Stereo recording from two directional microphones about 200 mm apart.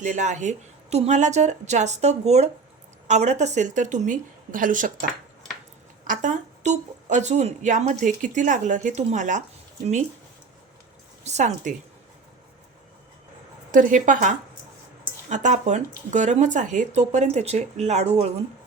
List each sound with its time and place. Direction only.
0.0 s speech: 35° right (ahead or behind)
6.1 s speech: 40° right (ahead or behind)
11.2 s speech: 35° right (ahead or behind)
13.7 s speech: 40° right (ahead or behind)